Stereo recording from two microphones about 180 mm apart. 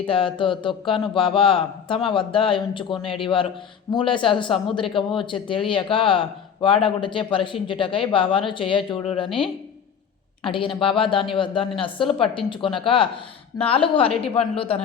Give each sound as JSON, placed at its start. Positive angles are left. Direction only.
{"t": 0.1, "sound": "a woman's voice", "side_deg": 30}